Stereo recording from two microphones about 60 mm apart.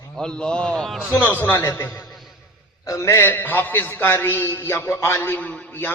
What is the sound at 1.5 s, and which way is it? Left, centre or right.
Speech, left.